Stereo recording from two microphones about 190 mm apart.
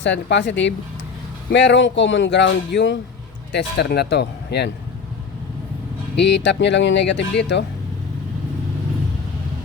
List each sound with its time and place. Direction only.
0.0 s speech: 70° left (ahead or behind)
6.1 s speech: 65° left (ahead or behind)